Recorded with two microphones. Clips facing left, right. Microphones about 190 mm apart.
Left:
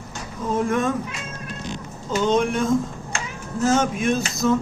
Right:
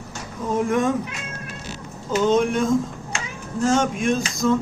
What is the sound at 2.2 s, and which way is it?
Speech, centre (ahead or behind).